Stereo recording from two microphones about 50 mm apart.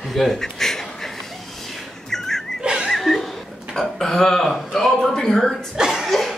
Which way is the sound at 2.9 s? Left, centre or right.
Centre.